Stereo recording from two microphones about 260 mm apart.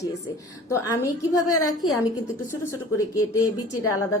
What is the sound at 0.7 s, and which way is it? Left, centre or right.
A woman's voice, centre.